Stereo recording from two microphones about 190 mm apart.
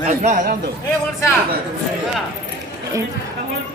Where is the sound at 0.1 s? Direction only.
40° right (ahead or behind).